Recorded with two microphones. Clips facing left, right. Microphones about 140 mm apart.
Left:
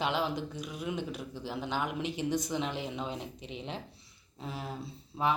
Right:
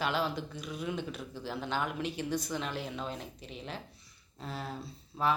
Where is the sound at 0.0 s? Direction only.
15° left (ahead or behind).